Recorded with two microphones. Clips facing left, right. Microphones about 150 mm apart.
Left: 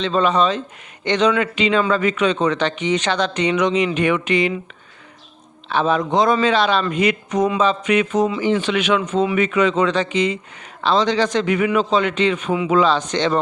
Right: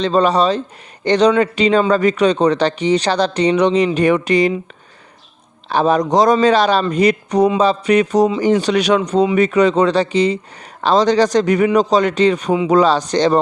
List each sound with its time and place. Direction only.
0.0 s speech: 35° right (ahead or behind)
5.6 s speech: 40° right (ahead or behind)